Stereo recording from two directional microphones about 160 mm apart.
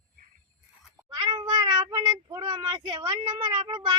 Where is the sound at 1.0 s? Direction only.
25° right (ahead or behind).